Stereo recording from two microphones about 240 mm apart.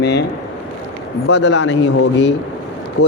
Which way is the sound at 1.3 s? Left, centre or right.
Left.